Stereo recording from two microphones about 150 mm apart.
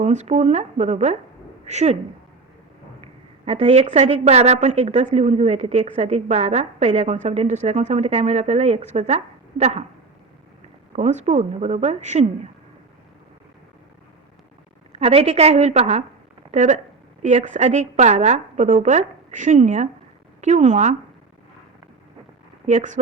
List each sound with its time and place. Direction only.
0.0 s a woman's voice: 50° right (ahead or behind)
3.4 s a woman's voice: 45° right (ahead or behind)
10.9 s a woman's voice: 50° right (ahead or behind)
14.9 s a woman's voice: 45° right (ahead or behind)
22.6 s speech: 55° right (ahead or behind)